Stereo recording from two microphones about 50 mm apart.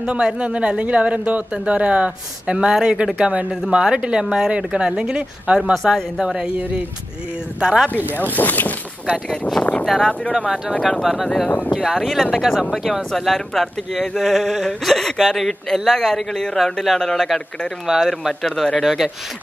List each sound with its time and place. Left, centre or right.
0.0 s speech: right
7.6 s speech: centre
8.2 s speech: left
9.8 s speech: centre
10.3 s speech: centre
17.8 s speech: centre
18.4 s speech: centre